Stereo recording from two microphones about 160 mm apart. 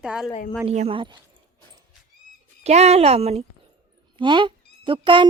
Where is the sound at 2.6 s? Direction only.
45° right (ahead or behind).